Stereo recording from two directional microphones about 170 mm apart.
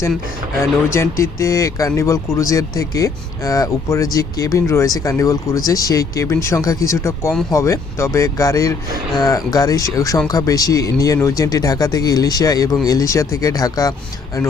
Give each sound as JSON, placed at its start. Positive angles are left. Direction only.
{"t": 0.6, "sound": "speech", "side_deg": 15}